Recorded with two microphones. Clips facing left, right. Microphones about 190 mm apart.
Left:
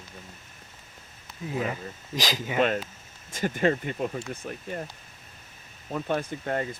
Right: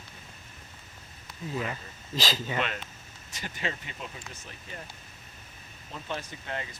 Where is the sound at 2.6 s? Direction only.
45° left (ahead or behind).